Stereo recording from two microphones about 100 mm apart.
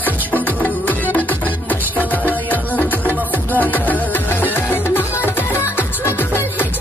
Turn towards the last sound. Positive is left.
turn(degrees=20)  # may be behind; listen again after turning